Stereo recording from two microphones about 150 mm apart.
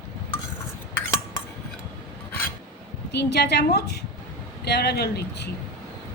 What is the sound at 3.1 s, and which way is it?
A woman's voice, 90° left.